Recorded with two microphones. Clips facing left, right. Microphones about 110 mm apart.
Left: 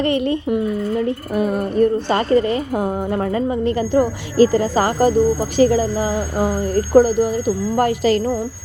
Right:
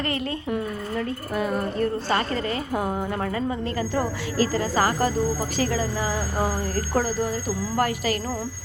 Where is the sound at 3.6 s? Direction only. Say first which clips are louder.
Left 9 dB; 20° left (ahead or behind).